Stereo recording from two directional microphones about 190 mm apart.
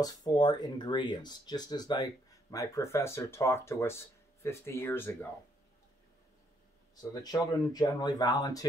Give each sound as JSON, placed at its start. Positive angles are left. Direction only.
{"t": 0.0, "sound": "speech", "side_deg": 20}
{"t": 7.0, "sound": "speech", "side_deg": 20}